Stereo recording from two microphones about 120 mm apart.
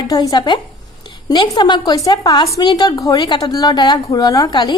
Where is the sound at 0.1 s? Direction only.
35° left (ahead or behind).